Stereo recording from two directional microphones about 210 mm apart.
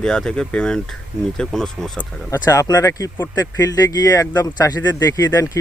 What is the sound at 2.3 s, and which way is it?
Speech, 15° left (ahead or behind).